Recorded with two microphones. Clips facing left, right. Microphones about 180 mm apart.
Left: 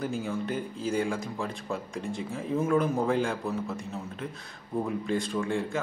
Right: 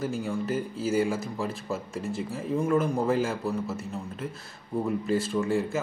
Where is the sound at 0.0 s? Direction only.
Centre (ahead or behind).